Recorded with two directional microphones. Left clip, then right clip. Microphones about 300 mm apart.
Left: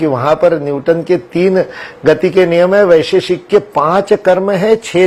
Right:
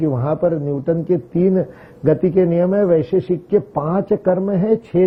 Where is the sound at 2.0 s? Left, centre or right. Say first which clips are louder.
Left 6 dB; centre.